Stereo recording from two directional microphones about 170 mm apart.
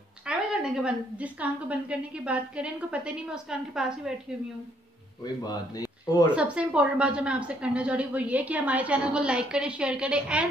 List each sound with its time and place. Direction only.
0.2 s a woman's voice: 5° right (ahead or behind)
5.2 s a man's voice: 25° left (ahead or behind)
6.3 s a woman's voice: 5° right (ahead or behind)